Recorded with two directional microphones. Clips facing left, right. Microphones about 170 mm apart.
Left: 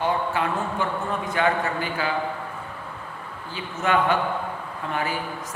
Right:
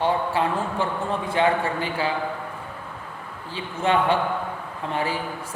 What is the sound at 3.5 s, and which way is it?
A man's voice, 30° right (ahead or behind).